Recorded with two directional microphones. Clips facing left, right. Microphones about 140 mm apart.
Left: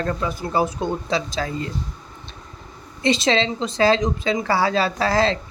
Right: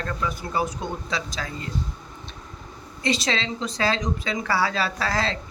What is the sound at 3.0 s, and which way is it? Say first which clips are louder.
Speech: left 6 dB; 25° left (ahead or behind).